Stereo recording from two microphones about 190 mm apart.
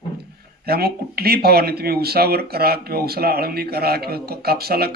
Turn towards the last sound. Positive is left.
turn(degrees=-55)  # may be behind; listen again after turning